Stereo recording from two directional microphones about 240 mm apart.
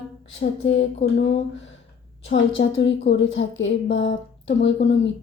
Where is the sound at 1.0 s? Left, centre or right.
Left.